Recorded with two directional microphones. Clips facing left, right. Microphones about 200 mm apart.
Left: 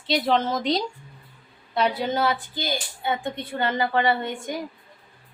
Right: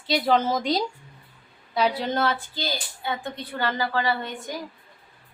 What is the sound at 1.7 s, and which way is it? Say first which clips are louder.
A woman's voice: even; 5° left (ahead or behind).